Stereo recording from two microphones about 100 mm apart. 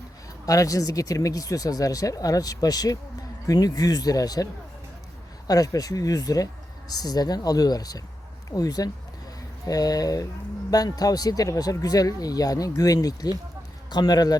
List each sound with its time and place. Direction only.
0.4 s speech: 35° left (ahead or behind)
5.5 s speech: 40° left (ahead or behind)